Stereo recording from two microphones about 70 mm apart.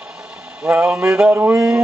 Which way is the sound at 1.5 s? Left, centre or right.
Centre.